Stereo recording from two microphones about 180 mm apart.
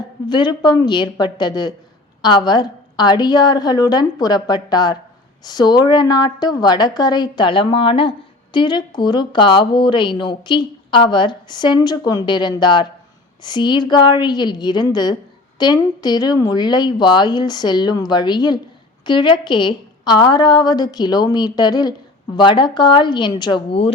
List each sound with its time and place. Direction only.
0.3 s speech: 25° left (ahead or behind)